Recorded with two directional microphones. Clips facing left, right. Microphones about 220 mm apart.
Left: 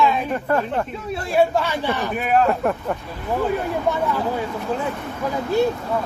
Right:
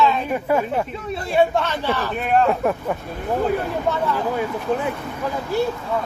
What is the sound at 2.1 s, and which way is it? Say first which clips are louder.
Speech: even; 5° left (ahead or behind).